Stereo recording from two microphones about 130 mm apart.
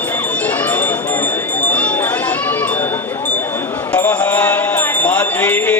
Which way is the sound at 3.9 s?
10° left (ahead or behind).